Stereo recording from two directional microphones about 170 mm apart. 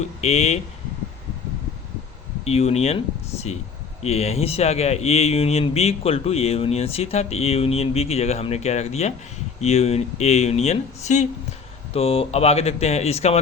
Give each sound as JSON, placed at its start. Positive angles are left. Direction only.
{"t": 0.0, "sound": "speech", "side_deg": 40}
{"t": 2.4, "sound": "speech", "side_deg": 40}
{"t": 4.0, "sound": "speech", "side_deg": 40}
{"t": 11.9, "sound": "speech", "side_deg": 35}